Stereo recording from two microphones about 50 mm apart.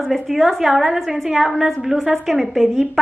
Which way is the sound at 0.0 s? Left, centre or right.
Centre.